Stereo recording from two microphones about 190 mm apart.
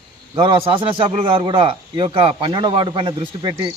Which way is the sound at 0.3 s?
25° right (ahead or behind).